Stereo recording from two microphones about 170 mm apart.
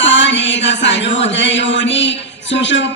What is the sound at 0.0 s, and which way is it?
Music, 90° left.